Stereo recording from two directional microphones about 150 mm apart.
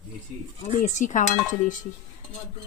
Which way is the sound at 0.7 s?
55° left (ahead or behind).